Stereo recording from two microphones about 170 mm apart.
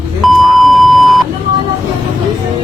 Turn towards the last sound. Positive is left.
turn(degrees=0)  # may be behind; listen again after turning